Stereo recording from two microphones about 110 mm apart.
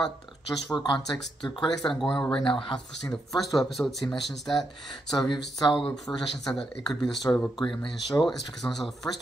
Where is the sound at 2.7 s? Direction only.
5° left (ahead or behind).